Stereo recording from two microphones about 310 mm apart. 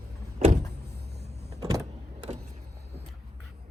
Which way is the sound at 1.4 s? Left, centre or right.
Centre.